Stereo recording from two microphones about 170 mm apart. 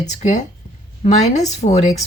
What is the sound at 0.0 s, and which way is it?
Speech, 45° left (ahead or behind).